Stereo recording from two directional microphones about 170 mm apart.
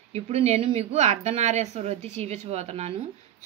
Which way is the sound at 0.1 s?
40° right (ahead or behind).